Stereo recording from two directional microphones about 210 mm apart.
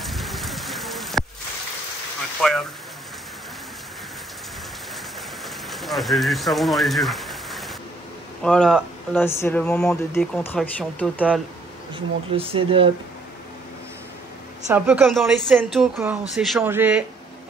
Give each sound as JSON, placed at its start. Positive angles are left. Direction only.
{"t": 0.0, "sound": "rain", "side_deg": 0}
{"t": 2.4, "sound": "a woman's voice", "side_deg": 5}
{"t": 5.7, "sound": "speech", "side_deg": 0}
{"t": 11.1, "sound": "a woman's voice", "side_deg": -5}
{"t": 11.9, "sound": "speech", "side_deg": -25}
{"t": 14.7, "sound": "a woman's voice", "side_deg": -10}